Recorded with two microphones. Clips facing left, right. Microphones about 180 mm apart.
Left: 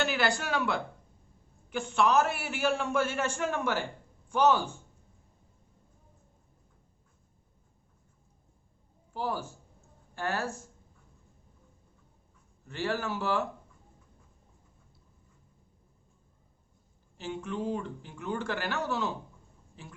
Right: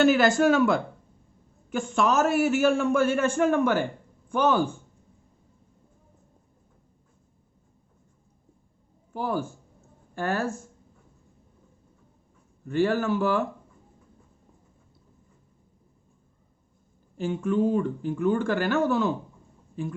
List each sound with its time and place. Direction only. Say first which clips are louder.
0.0 s a man's voice: right 11 dB; 45° right (ahead or behind)
9.1 s a man's voice: right 5 dB; 55° right (ahead or behind)
12.6 s a man's voice: right 9 dB; 55° right (ahead or behind)
17.2 s a man's voice: right 10 dB; 50° right (ahead or behind)